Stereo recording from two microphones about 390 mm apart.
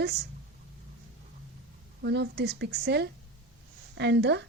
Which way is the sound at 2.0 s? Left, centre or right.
Right.